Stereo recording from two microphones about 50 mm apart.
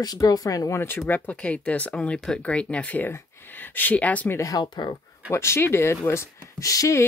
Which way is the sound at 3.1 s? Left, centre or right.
Left.